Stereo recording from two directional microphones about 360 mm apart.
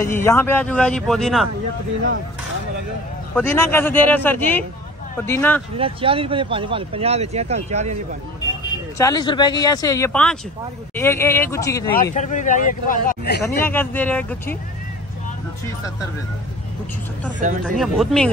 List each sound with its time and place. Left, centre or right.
0.0 s speech: centre
3.3 s speech: centre
5.8 s speech: centre
8.9 s speech: centre
12.2 s speech: left
13.7 s speech: centre
17.4 s speech: right
17.7 s speech: centre